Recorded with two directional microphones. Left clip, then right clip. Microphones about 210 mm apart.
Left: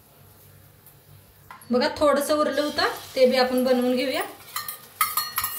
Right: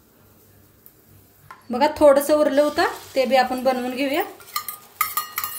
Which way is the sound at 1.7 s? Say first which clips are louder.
Right 6 dB; 50° right (ahead or behind).